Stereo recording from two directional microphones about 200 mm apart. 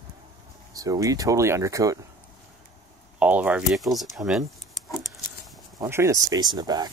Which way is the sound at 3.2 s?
5° right (ahead or behind).